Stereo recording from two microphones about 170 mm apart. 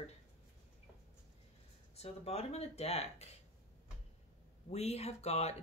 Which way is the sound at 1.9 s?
35° left (ahead or behind).